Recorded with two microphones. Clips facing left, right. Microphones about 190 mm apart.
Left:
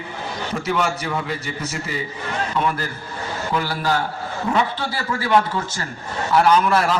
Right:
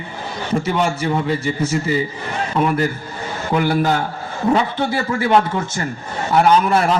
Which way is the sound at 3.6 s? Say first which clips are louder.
Right 8 dB; 20° right (ahead or behind).